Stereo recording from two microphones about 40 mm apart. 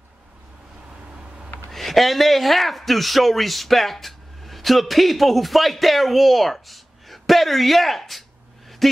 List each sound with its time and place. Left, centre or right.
1.7 s a man's voice: centre